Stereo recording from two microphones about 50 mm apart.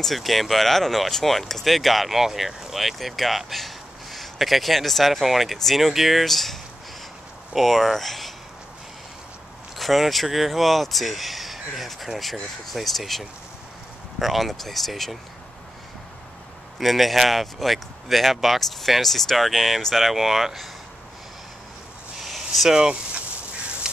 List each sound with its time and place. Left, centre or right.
0.0 s speech: centre
9.8 s speech: centre
16.8 s speech: centre
22.2 s a sound: centre
22.7 s speech: centre